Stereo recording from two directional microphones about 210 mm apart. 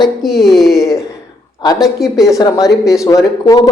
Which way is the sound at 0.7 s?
15° left (ahead or behind).